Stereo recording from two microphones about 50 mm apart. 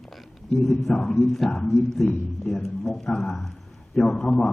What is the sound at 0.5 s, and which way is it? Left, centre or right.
A man's voice, centre.